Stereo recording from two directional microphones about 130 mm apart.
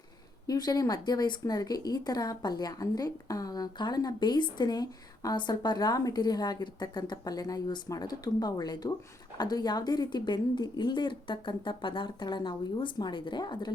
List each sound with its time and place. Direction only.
0.4 s speech: 30° left (ahead or behind)